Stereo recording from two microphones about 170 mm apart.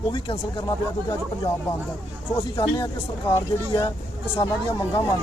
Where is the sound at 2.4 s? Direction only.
25° left (ahead or behind).